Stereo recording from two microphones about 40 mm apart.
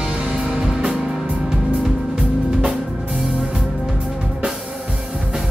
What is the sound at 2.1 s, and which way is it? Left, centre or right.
Music, right.